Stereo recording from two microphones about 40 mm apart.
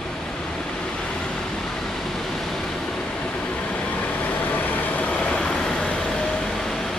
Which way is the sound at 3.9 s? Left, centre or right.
Left.